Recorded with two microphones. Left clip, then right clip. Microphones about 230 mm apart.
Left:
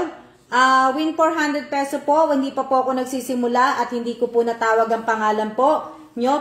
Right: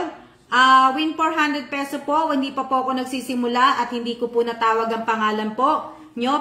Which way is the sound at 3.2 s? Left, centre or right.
Left.